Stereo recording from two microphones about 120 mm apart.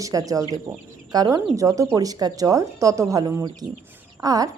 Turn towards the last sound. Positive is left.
turn(degrees=-30)  # may be behind; listen again after turning